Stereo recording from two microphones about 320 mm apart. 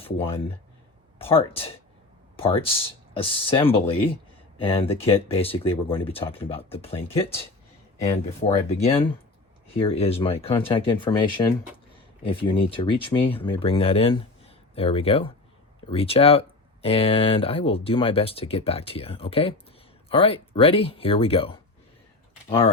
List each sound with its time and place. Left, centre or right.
0.0 s speech: centre
8.4 s speech: centre